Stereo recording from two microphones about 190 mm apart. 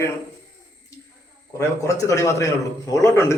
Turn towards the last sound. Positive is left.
turn(degrees=15)  # may be behind; listen again after turning